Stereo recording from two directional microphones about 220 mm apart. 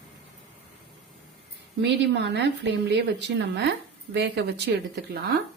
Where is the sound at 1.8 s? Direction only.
50° right (ahead or behind).